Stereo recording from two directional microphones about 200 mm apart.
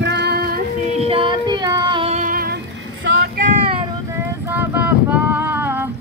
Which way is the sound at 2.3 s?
50° right (ahead or behind).